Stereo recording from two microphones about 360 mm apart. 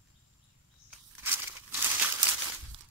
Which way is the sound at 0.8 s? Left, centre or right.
Centre.